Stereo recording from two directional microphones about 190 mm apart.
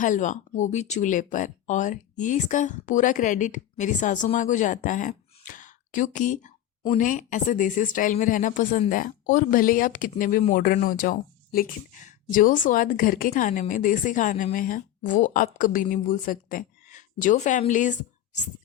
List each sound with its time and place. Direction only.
0.0 s speech: 40° left (ahead or behind)